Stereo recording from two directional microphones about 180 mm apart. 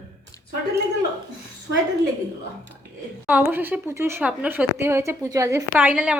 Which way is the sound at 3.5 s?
10° right (ahead or behind).